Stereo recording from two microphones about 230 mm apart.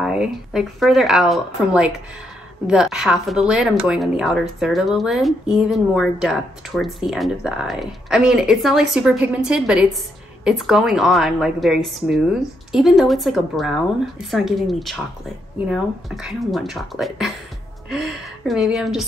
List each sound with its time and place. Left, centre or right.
0.0 s a woman's voice: centre